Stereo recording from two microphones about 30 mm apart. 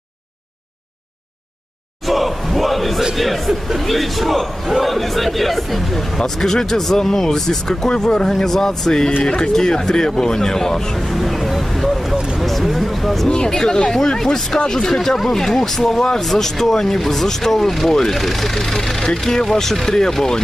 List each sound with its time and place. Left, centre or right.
2.0 s crowd: centre
3.2 s speech: centre
11.0 s vehicle: centre
12.4 s a sound: centre
13.3 s speech: left